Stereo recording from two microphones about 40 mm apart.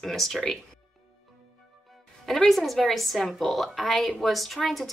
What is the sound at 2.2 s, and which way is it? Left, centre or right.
A woman's voice, centre.